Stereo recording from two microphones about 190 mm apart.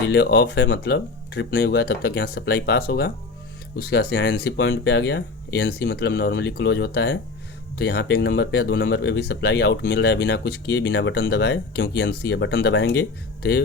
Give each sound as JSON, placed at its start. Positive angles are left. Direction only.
{"t": 0.1, "sound": "speech", "side_deg": 60}